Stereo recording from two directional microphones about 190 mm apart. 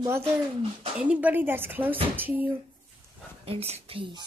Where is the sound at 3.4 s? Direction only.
30° right (ahead or behind).